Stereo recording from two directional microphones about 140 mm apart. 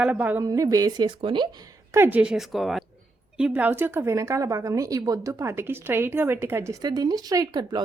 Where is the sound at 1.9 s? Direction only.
15° right (ahead or behind).